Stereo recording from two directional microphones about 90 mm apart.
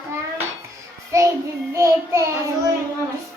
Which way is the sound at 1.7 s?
35° right (ahead or behind).